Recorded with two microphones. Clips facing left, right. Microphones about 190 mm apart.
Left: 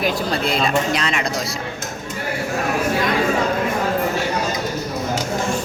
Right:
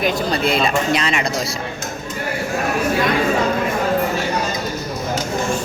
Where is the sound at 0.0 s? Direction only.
Centre (ahead or behind).